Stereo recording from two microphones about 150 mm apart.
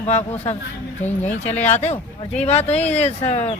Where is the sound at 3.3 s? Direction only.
45° left (ahead or behind).